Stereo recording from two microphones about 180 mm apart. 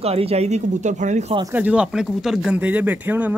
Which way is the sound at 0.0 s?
35° right (ahead or behind).